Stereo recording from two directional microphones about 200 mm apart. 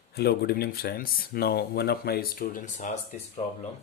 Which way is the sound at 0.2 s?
50° left (ahead or behind).